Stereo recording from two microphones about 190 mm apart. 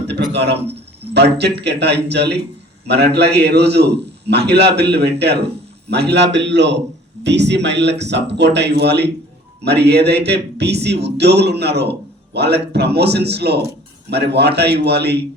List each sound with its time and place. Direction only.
0.1 s a man's voice: 65° right (ahead or behind)